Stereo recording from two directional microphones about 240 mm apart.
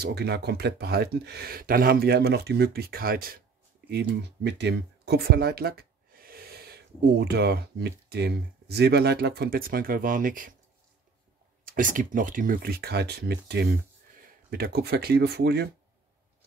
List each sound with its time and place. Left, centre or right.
0.0 s speech: right
4.4 s speech: right
11.6 s speech: right